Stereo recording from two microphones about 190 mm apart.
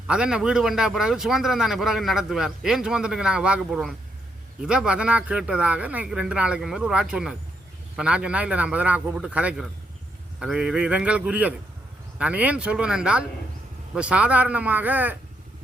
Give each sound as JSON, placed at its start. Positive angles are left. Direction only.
{"t": 0.1, "sound": "a man's voice", "side_deg": -5}